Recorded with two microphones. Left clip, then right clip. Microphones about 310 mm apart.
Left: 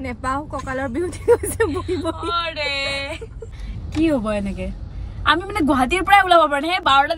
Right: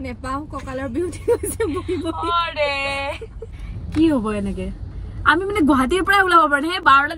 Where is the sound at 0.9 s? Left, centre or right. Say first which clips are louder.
Left 3 dB; centre.